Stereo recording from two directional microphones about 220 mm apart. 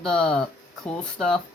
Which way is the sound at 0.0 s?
5° left (ahead or behind).